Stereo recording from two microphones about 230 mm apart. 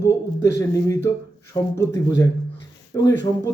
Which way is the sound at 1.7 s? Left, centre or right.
Centre.